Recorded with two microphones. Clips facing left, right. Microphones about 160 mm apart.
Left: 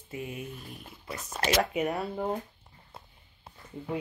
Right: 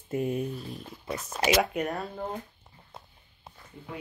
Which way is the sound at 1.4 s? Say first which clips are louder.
Right 1 dB; 5° right (ahead or behind).